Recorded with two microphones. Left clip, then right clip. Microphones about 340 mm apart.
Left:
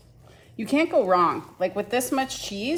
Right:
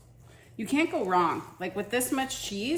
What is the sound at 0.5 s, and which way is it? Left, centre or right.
A woman's voice, centre.